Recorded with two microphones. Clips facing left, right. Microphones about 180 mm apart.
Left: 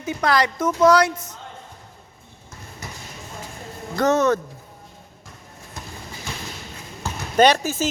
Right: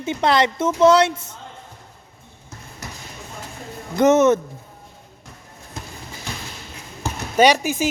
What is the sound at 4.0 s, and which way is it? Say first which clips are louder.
Speech: right 4 dB; 20° right (ahead or behind).